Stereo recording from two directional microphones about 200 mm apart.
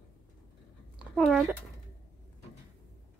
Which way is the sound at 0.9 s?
Centre (ahead or behind).